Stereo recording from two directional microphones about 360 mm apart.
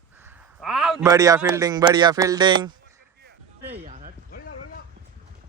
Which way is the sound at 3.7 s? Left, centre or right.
Centre.